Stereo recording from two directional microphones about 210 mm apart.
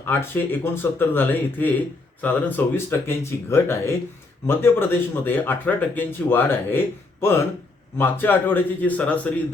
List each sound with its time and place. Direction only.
0.0 s speech: 10° left (ahead or behind)